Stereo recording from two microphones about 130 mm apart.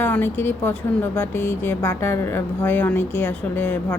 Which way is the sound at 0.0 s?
15° left (ahead or behind).